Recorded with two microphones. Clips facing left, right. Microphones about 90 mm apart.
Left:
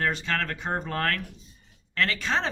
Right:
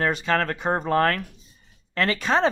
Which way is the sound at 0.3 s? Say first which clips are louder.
Right 6 dB; 40° right (ahead or behind).